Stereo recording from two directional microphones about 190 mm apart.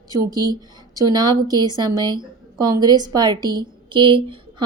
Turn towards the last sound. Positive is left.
turn(degrees=-25)  # may be behind; listen again after turning